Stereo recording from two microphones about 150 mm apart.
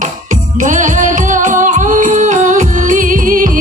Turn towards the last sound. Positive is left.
turn(degrees=-65)  # may be behind; listen again after turning